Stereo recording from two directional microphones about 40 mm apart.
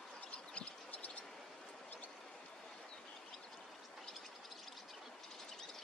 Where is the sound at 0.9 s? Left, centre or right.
Left.